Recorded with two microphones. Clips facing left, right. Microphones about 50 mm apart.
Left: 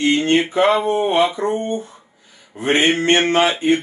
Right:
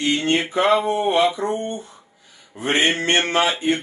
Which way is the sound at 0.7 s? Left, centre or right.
Left.